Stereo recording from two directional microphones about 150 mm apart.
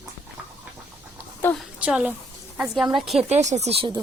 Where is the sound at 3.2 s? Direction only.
50° right (ahead or behind).